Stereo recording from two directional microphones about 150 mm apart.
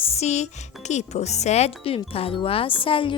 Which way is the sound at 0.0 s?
45° left (ahead or behind).